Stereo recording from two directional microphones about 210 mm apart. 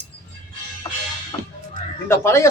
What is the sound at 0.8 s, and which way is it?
Music, 20° left (ahead or behind).